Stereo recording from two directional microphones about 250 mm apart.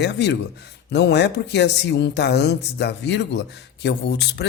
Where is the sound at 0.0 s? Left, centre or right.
Left.